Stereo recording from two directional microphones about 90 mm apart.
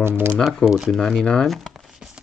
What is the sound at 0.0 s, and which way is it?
Speech, 25° right (ahead or behind).